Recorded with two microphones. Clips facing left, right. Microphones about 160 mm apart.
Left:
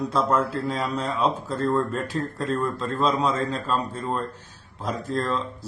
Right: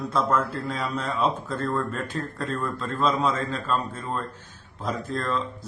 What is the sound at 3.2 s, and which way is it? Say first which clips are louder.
Speech: left 1 dB; 35° left (ahead or behind).